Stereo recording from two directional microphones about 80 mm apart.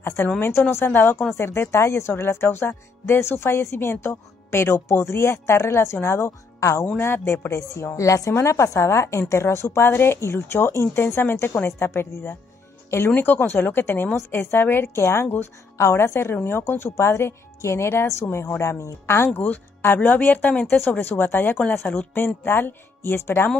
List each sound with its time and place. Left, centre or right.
0.0 s a woman's voice: left